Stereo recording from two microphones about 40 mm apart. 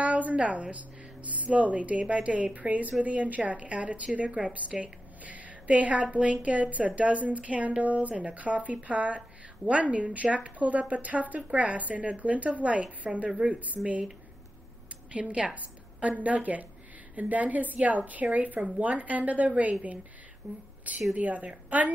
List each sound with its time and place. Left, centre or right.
0.0 s a woman's voice: right
15.1 s a woman's voice: right
20.4 s speech: centre
21.1 s a woman's voice: right